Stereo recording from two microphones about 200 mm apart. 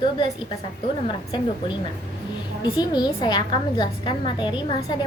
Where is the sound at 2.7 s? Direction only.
20° left (ahead or behind).